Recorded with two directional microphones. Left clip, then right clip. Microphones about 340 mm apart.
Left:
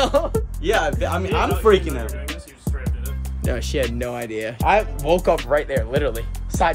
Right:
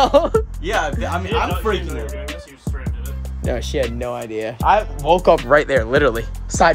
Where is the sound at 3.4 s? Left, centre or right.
Centre.